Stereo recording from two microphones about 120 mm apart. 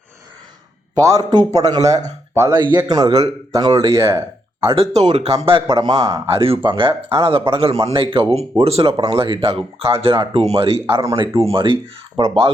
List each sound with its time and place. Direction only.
0.9 s speech: 30° right (ahead or behind)
2.5 s speech: 35° right (ahead or behind)
4.6 s speech: 50° right (ahead or behind)
5.6 s speech: 35° right (ahead or behind)
6.4 s speech: 50° right (ahead or behind)
10.8 s speech: 25° right (ahead or behind)
11.3 s speech: 50° right (ahead or behind)